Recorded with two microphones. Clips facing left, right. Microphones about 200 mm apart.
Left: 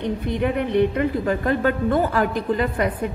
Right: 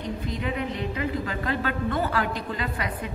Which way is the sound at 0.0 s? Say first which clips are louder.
Left 7 dB; 60° left (ahead or behind).